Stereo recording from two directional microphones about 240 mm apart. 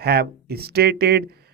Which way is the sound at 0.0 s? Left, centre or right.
Right.